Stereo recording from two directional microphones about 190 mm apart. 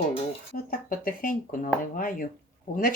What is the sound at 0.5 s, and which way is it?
Speech, 50° left (ahead or behind).